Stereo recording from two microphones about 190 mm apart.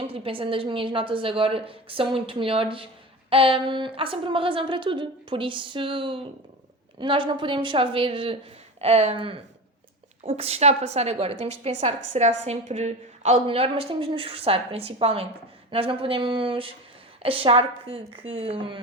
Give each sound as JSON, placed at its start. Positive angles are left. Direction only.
{"t": 0.1, "sound": "a woman's voice", "side_deg": -30}